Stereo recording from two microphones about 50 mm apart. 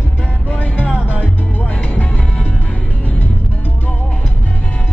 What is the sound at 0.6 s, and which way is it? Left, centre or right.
Music, left.